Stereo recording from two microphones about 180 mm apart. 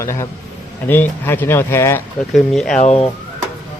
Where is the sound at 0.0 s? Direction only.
15° left (ahead or behind).